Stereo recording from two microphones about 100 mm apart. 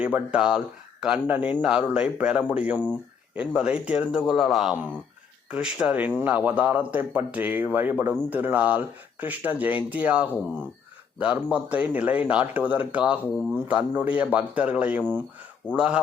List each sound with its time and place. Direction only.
0.0 s speech: 10° right (ahead or behind)